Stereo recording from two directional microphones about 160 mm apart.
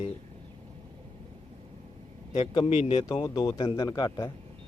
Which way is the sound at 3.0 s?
20° left (ahead or behind).